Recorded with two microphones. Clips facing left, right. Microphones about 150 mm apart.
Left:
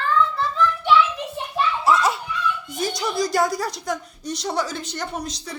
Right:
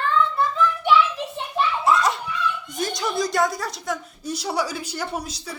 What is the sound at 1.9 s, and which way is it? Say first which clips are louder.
Children playing: left 1 dB; 5° left (ahead or behind).